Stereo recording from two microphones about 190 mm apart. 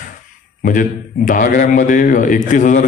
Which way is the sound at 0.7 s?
45° left (ahead or behind).